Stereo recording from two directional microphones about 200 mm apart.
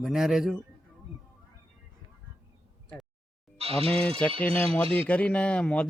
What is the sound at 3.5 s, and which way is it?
Music, 30° right (ahead or behind).